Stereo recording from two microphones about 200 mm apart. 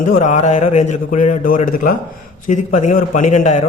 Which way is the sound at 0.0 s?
40° left (ahead or behind).